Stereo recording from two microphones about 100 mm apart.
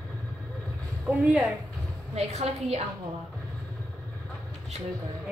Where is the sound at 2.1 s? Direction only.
90° right.